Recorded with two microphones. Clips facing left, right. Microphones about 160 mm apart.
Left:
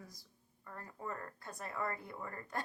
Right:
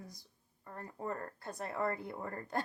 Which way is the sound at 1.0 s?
35° right (ahead or behind).